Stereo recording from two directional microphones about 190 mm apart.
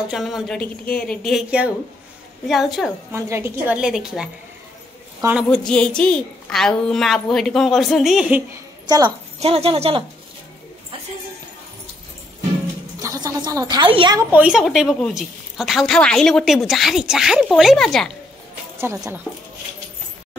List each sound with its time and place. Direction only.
0.1 s a woman's voice: centre (ahead or behind)
3.1 s a woman's voice: 15° right (ahead or behind)
5.5 s a woman's voice: 5° left (ahead or behind)
8.8 s a woman's voice: 20° right (ahead or behind)
9.4 s speech: 30° right (ahead or behind)
13.0 s speech: 15° right (ahead or behind)
14.3 s a woman's voice: 5° right (ahead or behind)
18.8 s a woman's voice: 15° right (ahead or behind)